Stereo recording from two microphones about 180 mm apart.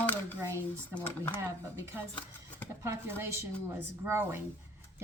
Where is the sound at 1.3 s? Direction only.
15° right (ahead or behind).